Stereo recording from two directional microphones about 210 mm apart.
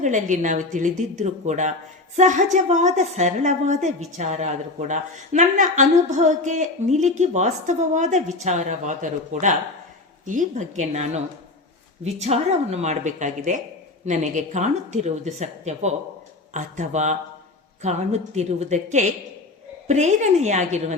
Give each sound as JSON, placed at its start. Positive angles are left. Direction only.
{"t": 0.0, "sound": "a woman's voice", "side_deg": -35}